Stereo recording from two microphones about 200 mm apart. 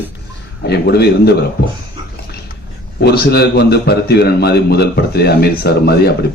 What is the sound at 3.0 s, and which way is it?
A man's voice, 55° left (ahead or behind).